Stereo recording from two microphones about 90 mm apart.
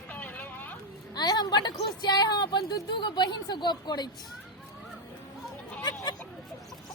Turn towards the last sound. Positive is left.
turn(degrees=50)  # may be behind; listen again after turning